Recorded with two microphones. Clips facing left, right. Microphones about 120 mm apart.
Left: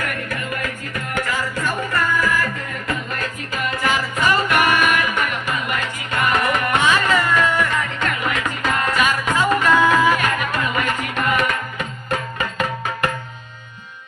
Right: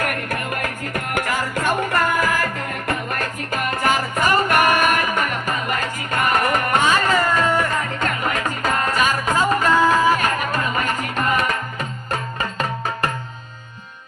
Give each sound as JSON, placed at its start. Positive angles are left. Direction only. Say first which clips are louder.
{"t": 0.0, "sound": "music", "louder": "right 2 dB", "side_deg": -55}